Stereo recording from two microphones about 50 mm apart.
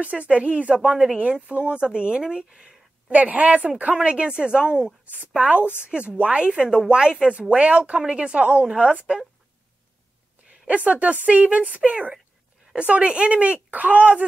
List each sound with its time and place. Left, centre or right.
0.0 s a woman's voice: right
1.1 s a woman's voice: right; by 2.7 s centre
3.1 s a woman's voice: right
10.7 s a woman's voice: right